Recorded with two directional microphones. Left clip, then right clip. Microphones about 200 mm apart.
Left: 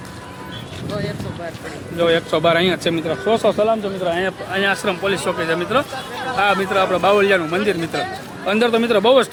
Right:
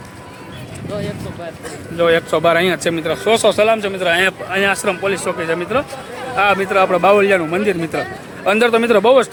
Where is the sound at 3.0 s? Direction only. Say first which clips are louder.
Right 4 dB; 35° right (ahead or behind).